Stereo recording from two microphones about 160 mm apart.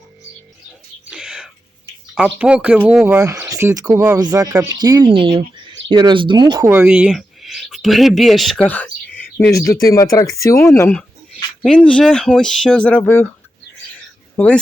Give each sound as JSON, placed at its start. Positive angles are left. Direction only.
{"t": 1.1, "sound": "whispering", "side_deg": -5}
{"t": 2.1, "sound": "speech", "side_deg": -5}
{"t": 3.1, "sound": "speech", "side_deg": -20}
{"t": 4.2, "sound": "speech", "side_deg": -25}
{"t": 6.7, "sound": "speech", "side_deg": -10}
{"t": 9.5, "sound": "speech", "side_deg": 20}
{"t": 14.3, "sound": "speech", "side_deg": 10}